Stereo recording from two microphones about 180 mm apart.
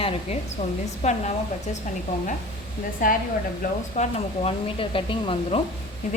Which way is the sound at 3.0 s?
50° left (ahead or behind).